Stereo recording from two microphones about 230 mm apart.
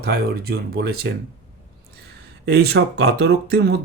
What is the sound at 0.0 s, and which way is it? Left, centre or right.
Speech, right.